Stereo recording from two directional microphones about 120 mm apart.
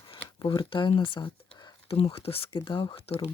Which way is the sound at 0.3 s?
40° left (ahead or behind).